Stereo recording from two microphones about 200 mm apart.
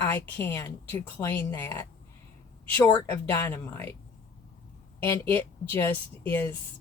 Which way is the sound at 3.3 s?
10° left (ahead or behind).